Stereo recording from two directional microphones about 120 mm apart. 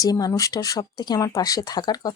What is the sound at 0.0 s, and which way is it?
Speech, 30° left (ahead or behind).